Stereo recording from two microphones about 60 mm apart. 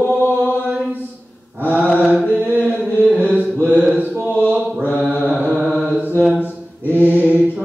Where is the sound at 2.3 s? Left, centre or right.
Right.